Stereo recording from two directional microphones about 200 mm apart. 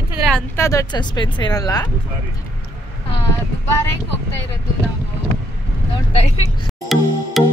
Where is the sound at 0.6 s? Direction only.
20° left (ahead or behind).